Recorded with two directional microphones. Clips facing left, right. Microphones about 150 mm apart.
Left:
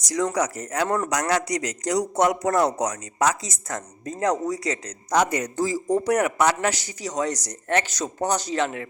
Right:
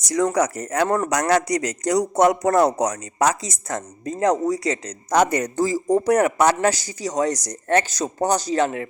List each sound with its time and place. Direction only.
0.1 s a man's voice: 50° right (ahead or behind); by 4.9 s 35° right (ahead or behind)
5.0 s a man's voice: 50° right (ahead or behind)